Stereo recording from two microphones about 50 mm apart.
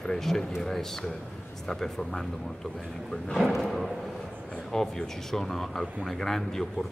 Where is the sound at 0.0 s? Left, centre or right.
Centre.